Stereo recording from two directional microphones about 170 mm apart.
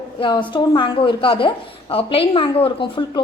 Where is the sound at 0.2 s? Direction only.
30° left (ahead or behind).